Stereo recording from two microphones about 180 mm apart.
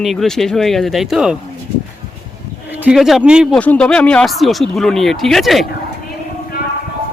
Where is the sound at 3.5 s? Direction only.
5° left (ahead or behind).